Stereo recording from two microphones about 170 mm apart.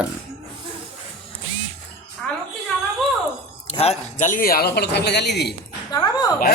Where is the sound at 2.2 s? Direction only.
5° left (ahead or behind).